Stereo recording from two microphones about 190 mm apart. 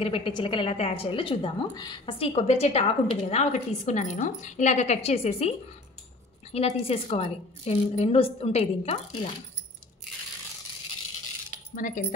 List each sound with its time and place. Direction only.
0.0 s a woman's voice: 25° left (ahead or behind)
6.5 s a woman's voice: 30° left (ahead or behind)
11.7 s speech: 45° left (ahead or behind)